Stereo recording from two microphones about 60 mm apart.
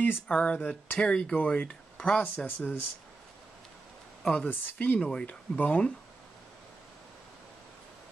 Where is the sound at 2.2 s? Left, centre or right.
Left.